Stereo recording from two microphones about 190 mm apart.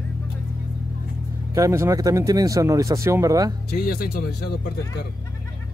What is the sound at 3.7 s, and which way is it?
Speech, 50° left (ahead or behind).